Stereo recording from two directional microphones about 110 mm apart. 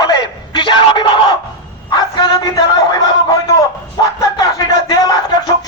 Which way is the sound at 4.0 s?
35° left (ahead or behind).